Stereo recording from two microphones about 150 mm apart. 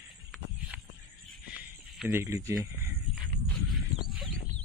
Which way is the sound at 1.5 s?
10° right (ahead or behind).